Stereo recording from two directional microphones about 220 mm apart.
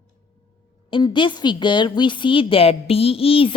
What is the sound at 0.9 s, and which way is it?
A woman's voice, 20° left (ahead or behind).